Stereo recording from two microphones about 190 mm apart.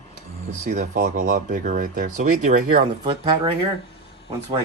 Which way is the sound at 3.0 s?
30° right (ahead or behind).